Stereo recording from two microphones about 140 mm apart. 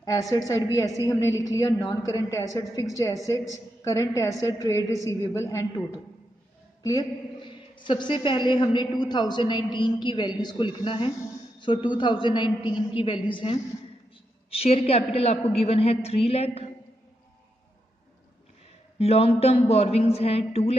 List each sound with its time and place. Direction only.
0.0 s a woman's voice: 25° left (ahead or behind); by 16.6 s 45° left (ahead or behind)
18.9 s a woman's voice: 45° left (ahead or behind)